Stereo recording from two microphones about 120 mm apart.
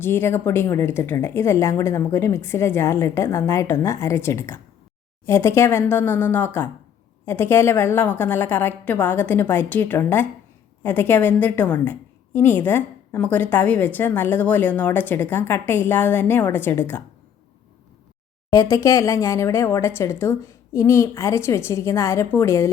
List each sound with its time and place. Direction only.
0.0 s a woman's voice: 20° left (ahead or behind)
18.5 s speech: 30° left (ahead or behind)